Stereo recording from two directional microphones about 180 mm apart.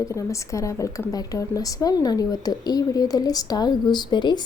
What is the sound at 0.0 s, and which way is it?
A woman's voice, 15° left (ahead or behind).